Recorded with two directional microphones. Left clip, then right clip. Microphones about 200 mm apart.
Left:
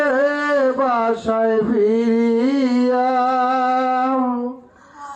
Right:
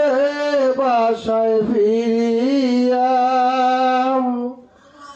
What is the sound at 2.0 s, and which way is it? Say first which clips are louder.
Music: even; 10° right (ahead or behind).